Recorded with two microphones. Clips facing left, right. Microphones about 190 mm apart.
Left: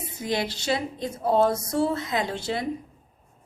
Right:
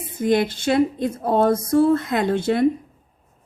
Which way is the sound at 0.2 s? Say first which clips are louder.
Right 9 dB; 50° right (ahead or behind).